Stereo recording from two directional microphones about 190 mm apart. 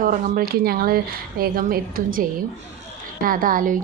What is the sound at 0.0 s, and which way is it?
Speech, 50° right (ahead or behind).